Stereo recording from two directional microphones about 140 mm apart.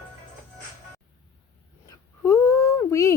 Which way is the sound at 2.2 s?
20° left (ahead or behind).